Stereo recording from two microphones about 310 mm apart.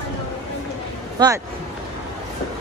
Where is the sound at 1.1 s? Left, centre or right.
Centre.